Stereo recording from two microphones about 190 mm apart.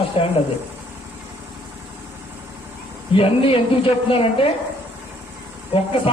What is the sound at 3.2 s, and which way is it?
A man's voice, 30° left (ahead or behind).